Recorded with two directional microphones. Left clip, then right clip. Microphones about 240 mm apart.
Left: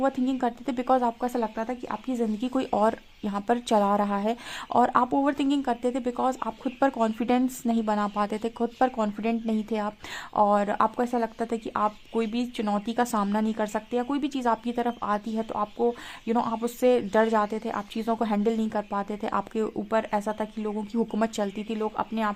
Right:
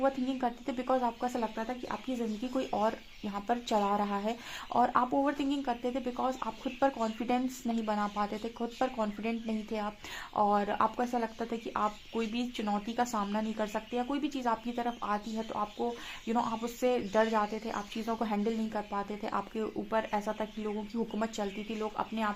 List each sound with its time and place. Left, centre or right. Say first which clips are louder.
0.0 s speech: left 5 dB; left